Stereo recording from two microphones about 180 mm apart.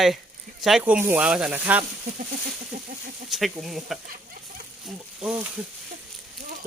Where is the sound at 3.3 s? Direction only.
Centre (ahead or behind).